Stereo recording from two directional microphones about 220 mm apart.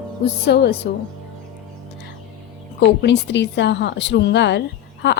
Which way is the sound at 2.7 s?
50° left (ahead or behind).